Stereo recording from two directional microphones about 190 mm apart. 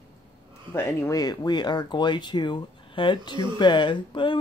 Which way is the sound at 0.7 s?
15° left (ahead or behind).